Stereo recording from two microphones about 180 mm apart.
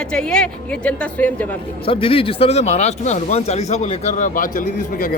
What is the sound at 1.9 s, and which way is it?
Speech, 30° left (ahead or behind).